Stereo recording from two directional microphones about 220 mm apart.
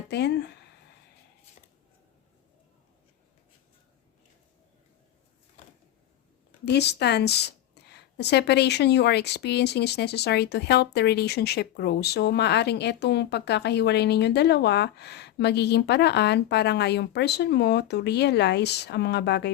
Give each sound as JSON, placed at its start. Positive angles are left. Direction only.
{"t": 0.1, "sound": "speech", "side_deg": 50}
{"t": 6.7, "sound": "speech", "side_deg": 50}